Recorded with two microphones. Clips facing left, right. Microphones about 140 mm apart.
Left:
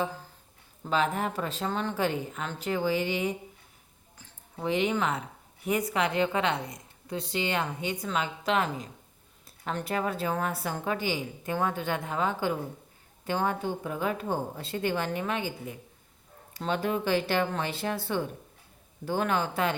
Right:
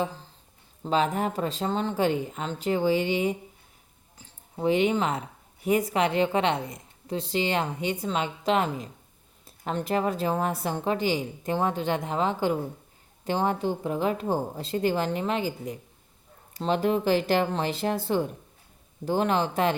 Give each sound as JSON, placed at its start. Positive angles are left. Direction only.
{"t": 0.9, "sound": "speech", "side_deg": -35}
{"t": 4.5, "sound": "speech", "side_deg": -30}